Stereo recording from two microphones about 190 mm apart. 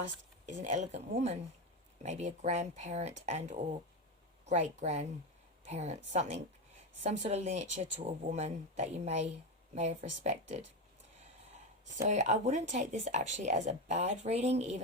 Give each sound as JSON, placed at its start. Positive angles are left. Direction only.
{"t": 0.4, "sound": "speech", "side_deg": -40}
{"t": 12.0, "sound": "speech", "side_deg": -40}